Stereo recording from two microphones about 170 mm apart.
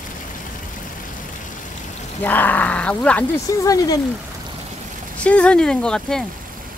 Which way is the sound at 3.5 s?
20° left (ahead or behind).